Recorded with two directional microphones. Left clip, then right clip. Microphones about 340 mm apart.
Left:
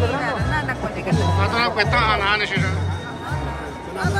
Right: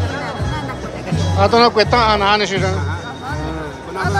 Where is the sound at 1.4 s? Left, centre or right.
Centre.